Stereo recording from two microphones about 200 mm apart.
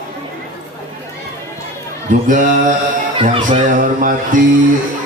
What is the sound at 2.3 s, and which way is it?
Mantra, 40° right (ahead or behind).